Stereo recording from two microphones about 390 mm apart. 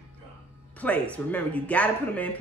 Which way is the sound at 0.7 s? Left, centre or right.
Centre.